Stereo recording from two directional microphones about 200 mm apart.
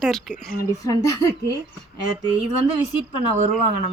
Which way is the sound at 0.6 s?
15° left (ahead or behind).